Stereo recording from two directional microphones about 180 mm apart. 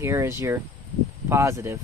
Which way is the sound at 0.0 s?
15° right (ahead or behind).